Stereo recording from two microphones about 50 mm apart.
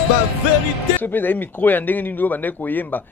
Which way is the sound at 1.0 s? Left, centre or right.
Left.